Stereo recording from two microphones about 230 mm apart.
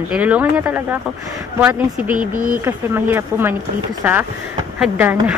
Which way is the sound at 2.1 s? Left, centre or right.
Right.